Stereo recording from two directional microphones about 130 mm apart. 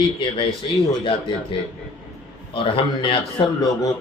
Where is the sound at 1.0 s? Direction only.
40° left (ahead or behind).